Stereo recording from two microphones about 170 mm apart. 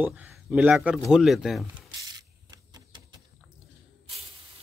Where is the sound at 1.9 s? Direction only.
20° right (ahead or behind).